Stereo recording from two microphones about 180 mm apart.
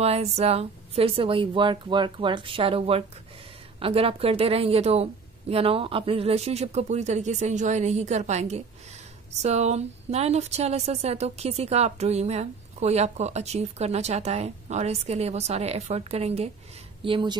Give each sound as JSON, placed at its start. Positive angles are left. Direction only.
{"t": 0.0, "sound": "a woman's voice", "side_deg": -35}